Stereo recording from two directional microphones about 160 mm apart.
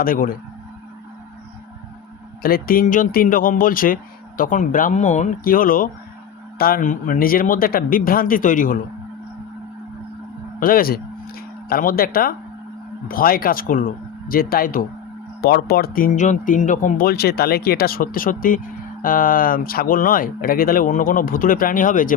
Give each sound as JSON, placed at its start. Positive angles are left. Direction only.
{"t": 0.0, "sound": "speech", "side_deg": 65}
{"t": 2.4, "sound": "speech", "side_deg": 65}
{"t": 10.6, "sound": "speech", "side_deg": 65}
{"t": 15.4, "sound": "speech", "side_deg": 80}